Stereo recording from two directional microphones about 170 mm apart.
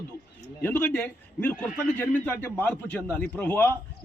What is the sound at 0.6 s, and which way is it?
A man's voice, 10° left (ahead or behind).